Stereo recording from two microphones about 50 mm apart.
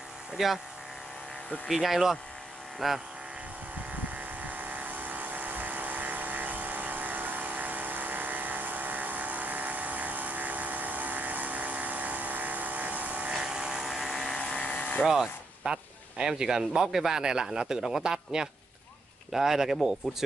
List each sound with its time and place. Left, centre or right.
0.4 s speech: centre
1.7 s speech: centre
4.4 s vehicle: right
13.4 s vehicle: centre
14.5 s a sound: left
15.0 s speech: centre